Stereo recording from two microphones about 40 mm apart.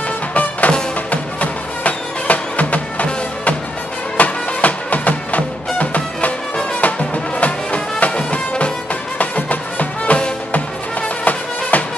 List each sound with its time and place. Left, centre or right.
0.3 s music: left